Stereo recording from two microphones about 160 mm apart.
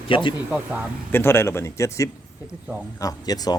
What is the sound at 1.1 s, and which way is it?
A man's voice, 15° left (ahead or behind).